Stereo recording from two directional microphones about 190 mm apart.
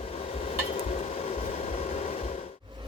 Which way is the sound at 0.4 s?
35° left (ahead or behind).